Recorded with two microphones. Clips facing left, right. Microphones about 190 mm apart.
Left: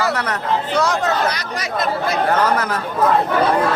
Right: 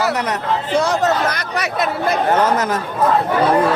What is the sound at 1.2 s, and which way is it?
Speech, 60° right (ahead or behind).